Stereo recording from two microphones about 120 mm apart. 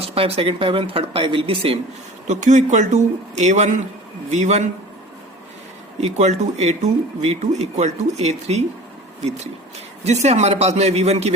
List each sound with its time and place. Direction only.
0.0 s speech: 55° right (ahead or behind)
2.2 s speech: 85° right; by 4.6 s 70° right (ahead or behind)
6.0 s speech: 75° right (ahead or behind)
10.0 s a man's voice: 65° right (ahead or behind)